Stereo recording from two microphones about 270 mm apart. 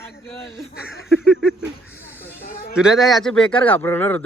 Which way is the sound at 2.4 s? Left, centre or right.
Left.